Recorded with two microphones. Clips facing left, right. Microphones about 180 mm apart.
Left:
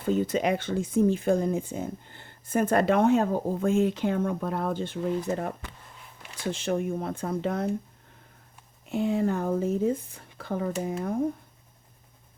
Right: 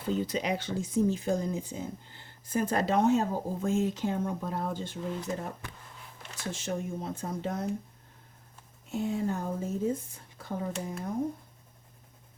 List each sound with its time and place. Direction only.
0.0 s speech: 50° left (ahead or behind)
8.9 s speech: 70° left (ahead or behind)